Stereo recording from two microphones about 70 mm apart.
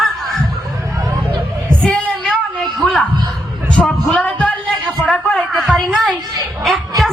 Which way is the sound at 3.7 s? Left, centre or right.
Centre.